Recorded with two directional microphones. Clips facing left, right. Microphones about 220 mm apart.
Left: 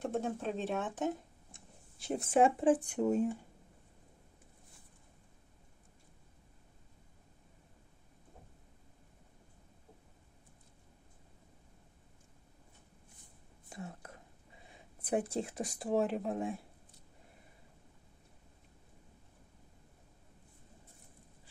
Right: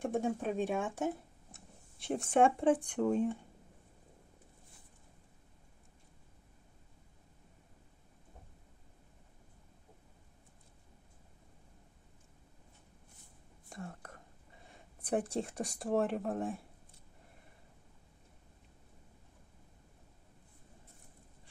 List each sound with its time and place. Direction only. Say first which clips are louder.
0.0 s speech: right 2 dB; 15° right (ahead or behind); by 3.0 s 5° left (ahead or behind)
13.7 s whispering: even; centre (ahead or behind)
14.7 s speech: even; centre (ahead or behind)